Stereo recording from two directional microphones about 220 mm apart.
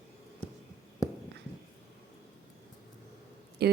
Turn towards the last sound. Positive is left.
turn(degrees=-45)  # may be behind; listen again after turning